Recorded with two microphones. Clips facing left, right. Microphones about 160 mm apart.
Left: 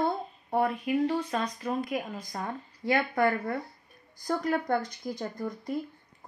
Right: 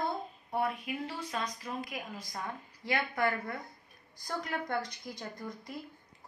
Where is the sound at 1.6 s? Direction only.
50° left (ahead or behind).